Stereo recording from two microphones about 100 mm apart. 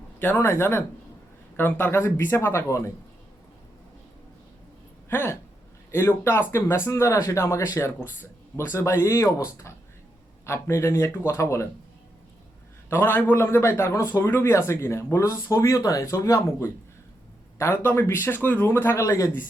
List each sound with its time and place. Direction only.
0.2 s a man's voice: 25° left (ahead or behind)
5.0 s a man's voice: 25° left (ahead or behind)
12.9 s a man's voice: 25° left (ahead or behind)